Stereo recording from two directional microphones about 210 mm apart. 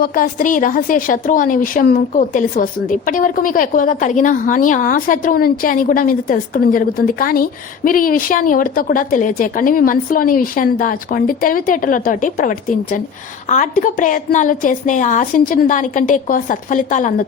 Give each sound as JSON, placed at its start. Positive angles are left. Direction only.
{"t": 0.0, "sound": "a woman's voice", "side_deg": 45}